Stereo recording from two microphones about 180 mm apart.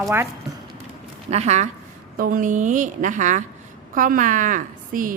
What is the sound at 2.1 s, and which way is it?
A woman's voice, 50° right (ahead or behind).